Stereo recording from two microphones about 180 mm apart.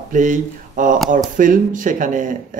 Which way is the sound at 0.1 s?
45° right (ahead or behind).